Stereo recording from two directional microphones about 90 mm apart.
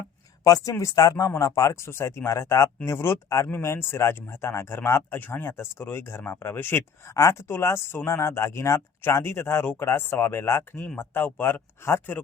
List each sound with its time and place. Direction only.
0.4 s speech: 40° left (ahead or behind); by 12.2 s 20° left (ahead or behind)